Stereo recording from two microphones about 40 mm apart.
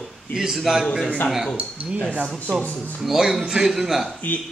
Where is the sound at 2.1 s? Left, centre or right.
Right.